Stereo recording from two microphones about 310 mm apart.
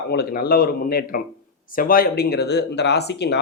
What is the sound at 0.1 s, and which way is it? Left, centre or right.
Speech, left.